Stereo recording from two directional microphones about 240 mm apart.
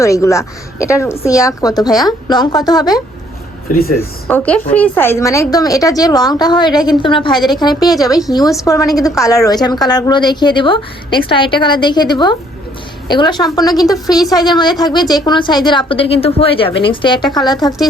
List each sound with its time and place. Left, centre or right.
0.0 s a woman's voice: centre
4.3 s a woman's voice: centre